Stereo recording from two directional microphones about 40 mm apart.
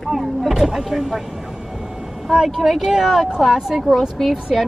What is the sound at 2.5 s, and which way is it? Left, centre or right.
Speech, centre.